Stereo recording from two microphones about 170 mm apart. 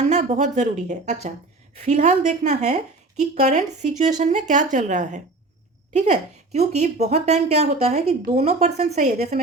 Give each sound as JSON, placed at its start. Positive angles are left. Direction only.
{"t": 0.1, "sound": "a woman's voice", "side_deg": -45}